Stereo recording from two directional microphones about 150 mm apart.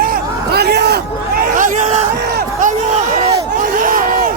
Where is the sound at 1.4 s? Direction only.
60° right (ahead or behind).